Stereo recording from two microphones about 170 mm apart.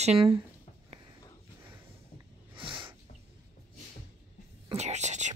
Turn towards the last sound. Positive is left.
turn(degrees=-45)  # may be behind; listen again after turning